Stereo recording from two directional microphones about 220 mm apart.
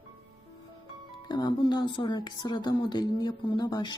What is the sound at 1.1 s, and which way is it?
A woman's voice, 20° left (ahead or behind).